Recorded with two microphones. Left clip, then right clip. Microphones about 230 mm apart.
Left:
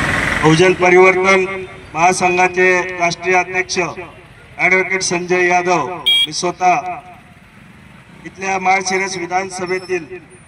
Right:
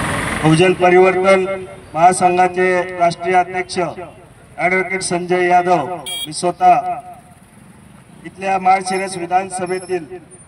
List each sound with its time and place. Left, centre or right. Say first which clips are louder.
0.6 s a man's voice: even; right
8.3 s a man's voice: right 1 dB; right